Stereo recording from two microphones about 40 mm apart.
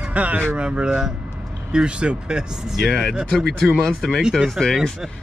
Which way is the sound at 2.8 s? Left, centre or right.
Centre.